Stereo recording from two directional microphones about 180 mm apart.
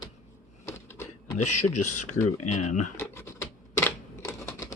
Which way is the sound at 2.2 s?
40° left (ahead or behind).